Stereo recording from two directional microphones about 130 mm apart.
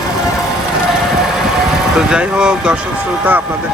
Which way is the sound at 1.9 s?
5° right (ahead or behind).